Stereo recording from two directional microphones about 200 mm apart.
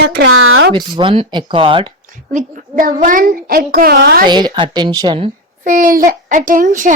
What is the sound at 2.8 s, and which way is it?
A child's voice, 40° right (ahead or behind).